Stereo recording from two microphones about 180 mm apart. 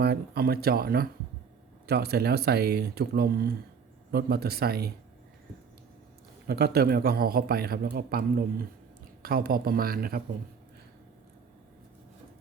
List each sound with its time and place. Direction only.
0.0 s a man's voice: 60° right (ahead or behind)
6.5 s a man's voice: 60° right (ahead or behind)